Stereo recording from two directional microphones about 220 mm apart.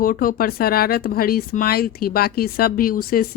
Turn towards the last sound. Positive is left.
turn(degrees=40)  # may be behind; listen again after turning